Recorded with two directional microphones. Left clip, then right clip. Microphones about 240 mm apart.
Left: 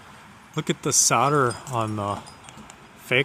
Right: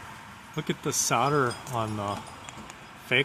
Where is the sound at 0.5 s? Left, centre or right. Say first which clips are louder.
Left 6 dB; left.